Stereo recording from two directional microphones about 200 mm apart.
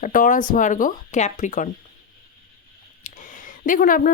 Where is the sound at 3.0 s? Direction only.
40° left (ahead or behind).